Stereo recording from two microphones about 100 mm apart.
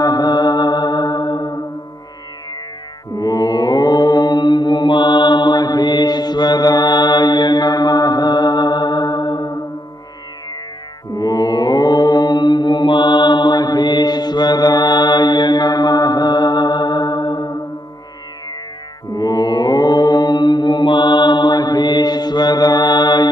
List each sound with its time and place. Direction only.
0.0 s music: 45° left (ahead or behind)
3.1 s mantra: 40° left (ahead or behind)
11.1 s mantra: 40° left (ahead or behind)
19.1 s mantra: 35° left (ahead or behind)